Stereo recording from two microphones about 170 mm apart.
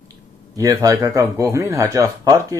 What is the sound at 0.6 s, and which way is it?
Speech, 20° right (ahead or behind).